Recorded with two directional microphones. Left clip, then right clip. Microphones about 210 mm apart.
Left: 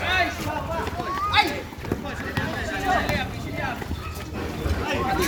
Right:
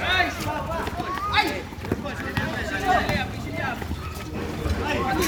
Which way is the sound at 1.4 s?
45° left (ahead or behind).